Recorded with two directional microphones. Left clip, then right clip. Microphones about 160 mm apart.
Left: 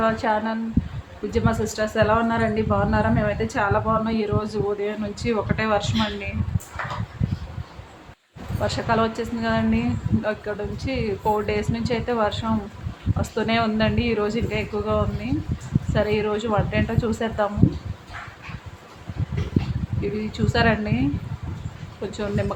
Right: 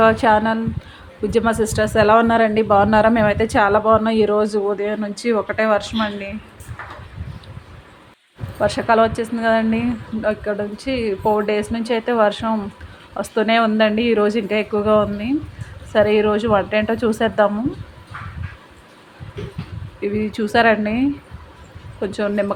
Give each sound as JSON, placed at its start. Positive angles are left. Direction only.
{"t": 0.0, "sound": "speech", "side_deg": -60}
{"t": 8.6, "sound": "speech", "side_deg": -45}
{"t": 10.2, "sound": "speech", "side_deg": -30}
{"t": 20.0, "sound": "speech", "side_deg": -40}
{"t": 22.0, "sound": "speech", "side_deg": -45}